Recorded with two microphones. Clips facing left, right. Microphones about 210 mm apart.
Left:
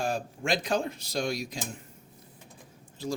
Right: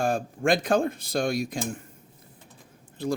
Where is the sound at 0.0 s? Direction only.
50° right (ahead or behind).